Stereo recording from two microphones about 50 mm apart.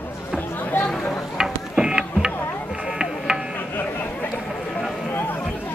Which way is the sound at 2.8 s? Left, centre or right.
Centre.